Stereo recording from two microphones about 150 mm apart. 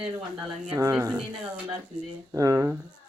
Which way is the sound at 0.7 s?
20° right (ahead or behind).